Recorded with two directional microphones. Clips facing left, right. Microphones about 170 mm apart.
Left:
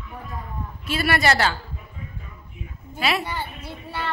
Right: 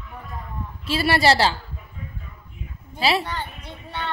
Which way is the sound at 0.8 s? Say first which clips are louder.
Right 3 dB; 30° right (ahead or behind).